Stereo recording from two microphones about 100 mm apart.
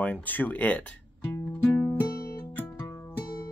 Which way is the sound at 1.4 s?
15° left (ahead or behind).